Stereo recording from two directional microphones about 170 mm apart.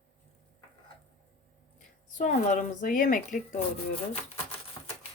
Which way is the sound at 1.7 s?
50° left (ahead or behind).